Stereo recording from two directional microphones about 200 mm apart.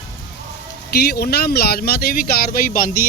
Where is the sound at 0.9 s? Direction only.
55° left (ahead or behind).